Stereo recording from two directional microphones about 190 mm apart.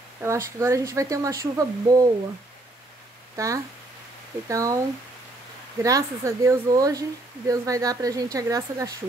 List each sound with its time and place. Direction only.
0.2 s a woman's voice: 15° right (ahead or behind)
3.3 s a woman's voice: 15° right (ahead or behind)